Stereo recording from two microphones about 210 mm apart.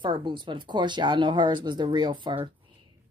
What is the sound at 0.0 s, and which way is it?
Speech, 25° right (ahead or behind).